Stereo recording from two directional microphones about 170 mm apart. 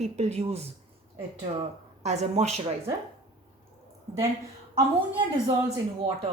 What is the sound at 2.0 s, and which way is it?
Speech, 40° right (ahead or behind).